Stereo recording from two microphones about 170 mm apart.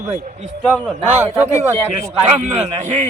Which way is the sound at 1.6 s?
40° right (ahead or behind).